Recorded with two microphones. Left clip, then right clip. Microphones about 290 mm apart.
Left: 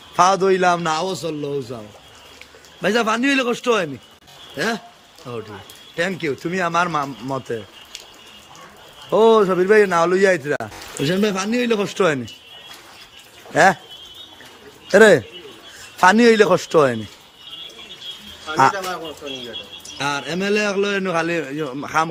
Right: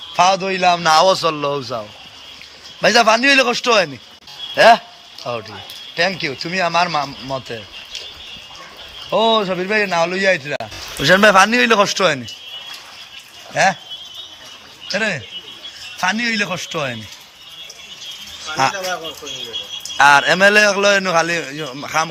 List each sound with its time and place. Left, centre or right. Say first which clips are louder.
0.2 s a man's voice: even; centre
2.8 s a man's voice: right 7 dB; centre
9.0 s a man's voice: left 2 dB; centre
11.0 s a man's voice: right 11 dB; centre
13.5 s speech: left 1 dB; centre
14.9 s a man's voice: left 10 dB; left
20.0 s a man's voice: right 13 dB; centre